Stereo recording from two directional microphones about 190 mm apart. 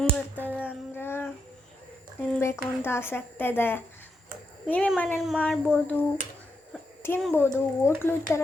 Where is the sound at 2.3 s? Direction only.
15° left (ahead or behind).